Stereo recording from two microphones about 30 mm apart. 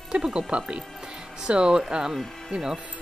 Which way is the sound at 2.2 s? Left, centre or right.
Centre.